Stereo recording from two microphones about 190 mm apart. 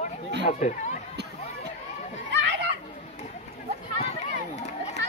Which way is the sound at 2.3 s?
65° right (ahead or behind).